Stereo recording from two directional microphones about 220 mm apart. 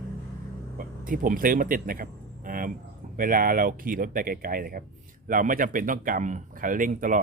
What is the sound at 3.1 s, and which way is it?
Speech, 40° right (ahead or behind).